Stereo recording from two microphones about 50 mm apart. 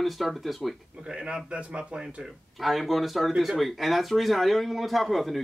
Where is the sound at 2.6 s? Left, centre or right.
Centre.